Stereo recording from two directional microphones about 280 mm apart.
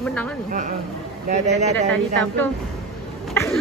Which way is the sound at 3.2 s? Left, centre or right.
Centre.